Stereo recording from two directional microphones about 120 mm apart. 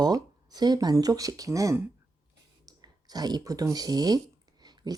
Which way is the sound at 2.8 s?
35° right (ahead or behind).